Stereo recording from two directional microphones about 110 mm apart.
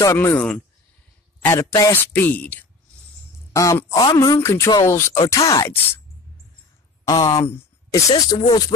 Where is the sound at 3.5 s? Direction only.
30° left (ahead or behind).